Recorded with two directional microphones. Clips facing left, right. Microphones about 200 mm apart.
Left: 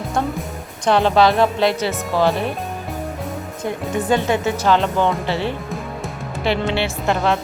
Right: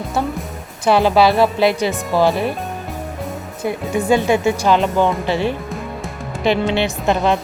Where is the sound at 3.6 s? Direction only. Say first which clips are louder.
Right 3 dB; 10° right (ahead or behind).